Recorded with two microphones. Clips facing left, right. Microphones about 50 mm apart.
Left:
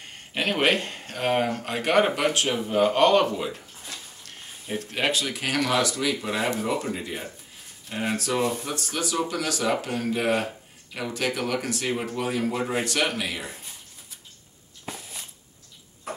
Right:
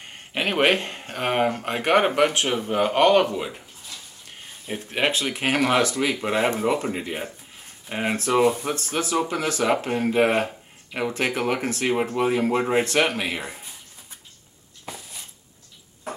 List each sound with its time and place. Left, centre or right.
0.3 s speech: centre
4.6 s speech: right